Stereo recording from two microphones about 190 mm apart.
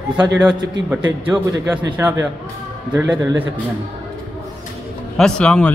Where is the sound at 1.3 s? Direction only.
5° right (ahead or behind).